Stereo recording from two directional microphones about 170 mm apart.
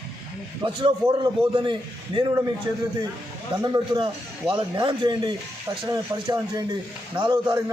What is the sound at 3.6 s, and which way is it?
A man's voice, 25° right (ahead or behind).